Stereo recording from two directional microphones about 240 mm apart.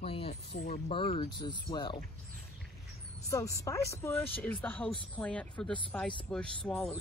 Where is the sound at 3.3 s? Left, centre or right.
Centre.